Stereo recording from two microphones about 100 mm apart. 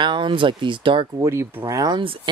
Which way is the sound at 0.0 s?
55° right (ahead or behind).